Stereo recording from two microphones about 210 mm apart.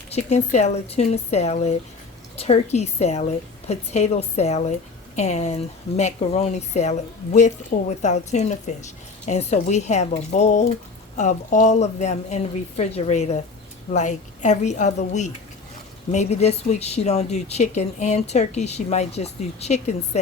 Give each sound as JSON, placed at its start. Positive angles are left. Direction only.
{"t": 0.1, "sound": "speech", "side_deg": 30}